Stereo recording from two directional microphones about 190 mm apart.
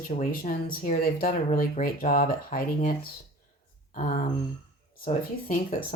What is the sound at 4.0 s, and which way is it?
Speech, 45° left (ahead or behind).